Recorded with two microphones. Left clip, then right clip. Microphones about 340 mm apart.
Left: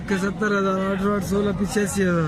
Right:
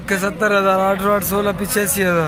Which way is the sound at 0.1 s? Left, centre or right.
Centre.